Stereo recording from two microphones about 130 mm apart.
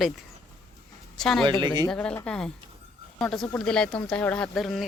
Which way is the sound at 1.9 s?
5° left (ahead or behind).